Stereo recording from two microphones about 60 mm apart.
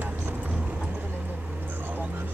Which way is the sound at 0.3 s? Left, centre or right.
Right.